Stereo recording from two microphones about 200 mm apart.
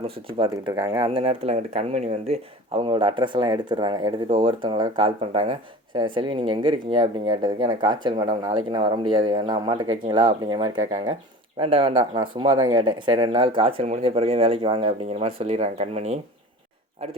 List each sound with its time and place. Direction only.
0.3 s speech: 20° right (ahead or behind)